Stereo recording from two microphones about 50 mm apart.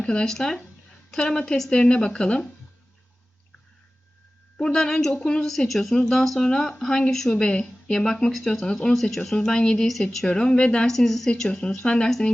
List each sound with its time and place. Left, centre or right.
0.0 s speech: centre
4.6 s speech: centre
10.8 s speech: centre
11.3 s speech: centre